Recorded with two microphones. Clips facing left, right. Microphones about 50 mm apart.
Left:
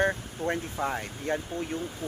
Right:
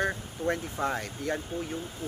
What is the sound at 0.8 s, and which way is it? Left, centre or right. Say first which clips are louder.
Speech: right 1 dB; centre.